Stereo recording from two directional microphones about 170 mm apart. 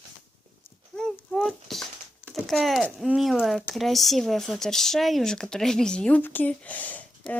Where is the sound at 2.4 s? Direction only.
Centre (ahead or behind).